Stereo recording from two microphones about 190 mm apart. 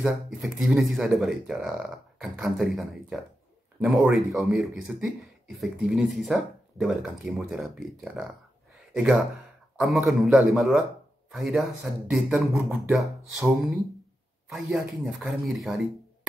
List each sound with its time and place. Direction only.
0.0 s speech: centre (ahead or behind)